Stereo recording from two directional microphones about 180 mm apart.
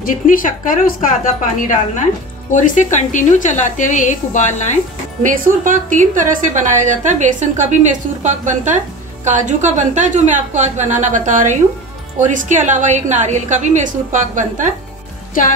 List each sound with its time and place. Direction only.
0.0 s a woman's voice: 50° left (ahead or behind)
2.5 s a woman's voice: 45° left (ahead or behind)
5.2 s a woman's voice: 45° right (ahead or behind)
15.4 s a woman's voice: 45° left (ahead or behind)